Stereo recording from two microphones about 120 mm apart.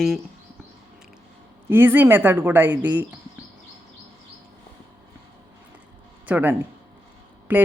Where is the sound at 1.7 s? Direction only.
15° right (ahead or behind).